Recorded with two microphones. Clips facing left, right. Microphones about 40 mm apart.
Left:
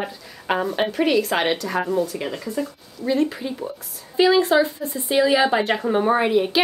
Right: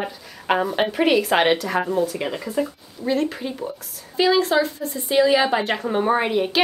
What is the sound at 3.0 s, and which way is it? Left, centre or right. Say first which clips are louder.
A woman's voice: left 1 dB; centre.